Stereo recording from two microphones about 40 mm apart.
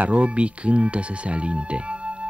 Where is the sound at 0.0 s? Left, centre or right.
Right.